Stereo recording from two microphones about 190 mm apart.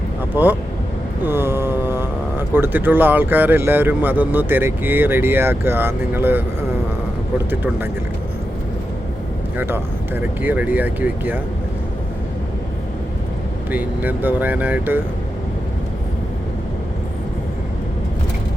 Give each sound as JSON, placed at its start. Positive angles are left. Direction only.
{"t": 0.4, "sound": "speech", "side_deg": -10}
{"t": 1.2, "sound": "a sound", "side_deg": -10}
{"t": 2.6, "sound": "speech", "side_deg": -10}
{"t": 9.6, "sound": "speech", "side_deg": -10}
{"t": 13.7, "sound": "speech", "side_deg": -10}